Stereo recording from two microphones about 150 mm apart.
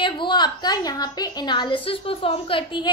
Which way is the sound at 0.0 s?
30° left (ahead or behind).